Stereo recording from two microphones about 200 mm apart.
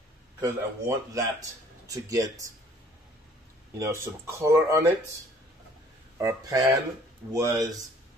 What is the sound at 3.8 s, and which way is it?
Speech, 15° right (ahead or behind).